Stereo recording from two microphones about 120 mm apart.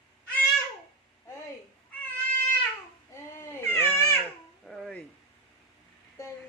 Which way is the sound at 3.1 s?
20° left (ahead or behind).